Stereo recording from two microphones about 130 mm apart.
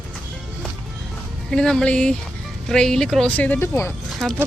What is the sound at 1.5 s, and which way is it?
Speech, 5° left (ahead or behind).